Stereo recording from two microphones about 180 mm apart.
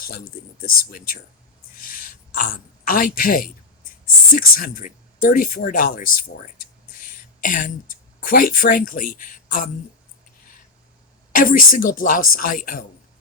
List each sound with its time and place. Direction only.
0.6 s speech: 55° left (ahead or behind)
1.8 s a sound: 50° left (ahead or behind)
4.4 s speech: 50° left (ahead or behind)
11.3 s speech: 50° left (ahead or behind)